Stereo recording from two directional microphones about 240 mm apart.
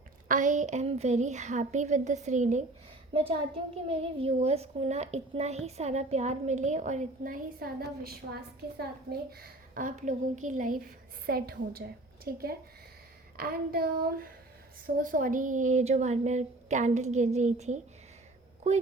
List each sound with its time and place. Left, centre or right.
0.3 s a woman's voice: right